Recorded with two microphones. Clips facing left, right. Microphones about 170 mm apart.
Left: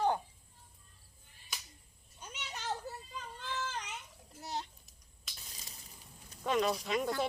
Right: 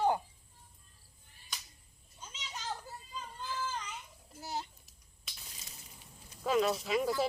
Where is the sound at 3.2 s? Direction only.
70° left (ahead or behind).